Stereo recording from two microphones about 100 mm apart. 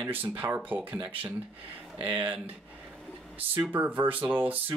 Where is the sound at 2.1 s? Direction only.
15° right (ahead or behind).